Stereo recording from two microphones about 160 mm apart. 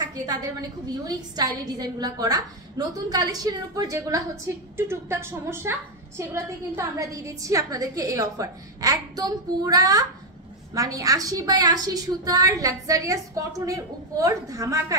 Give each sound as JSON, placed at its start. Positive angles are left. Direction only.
{"t": 0.1, "sound": "a woman's voice", "side_deg": -25}